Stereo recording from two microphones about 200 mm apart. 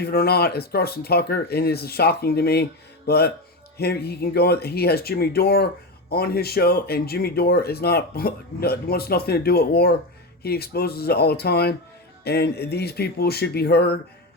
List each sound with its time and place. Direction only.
0.0 s speech: 50° left (ahead or behind)